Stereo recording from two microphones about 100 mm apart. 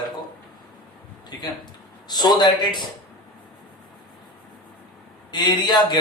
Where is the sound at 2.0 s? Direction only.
45° left (ahead or behind).